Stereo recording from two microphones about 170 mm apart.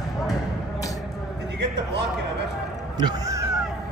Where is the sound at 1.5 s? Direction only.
85° right.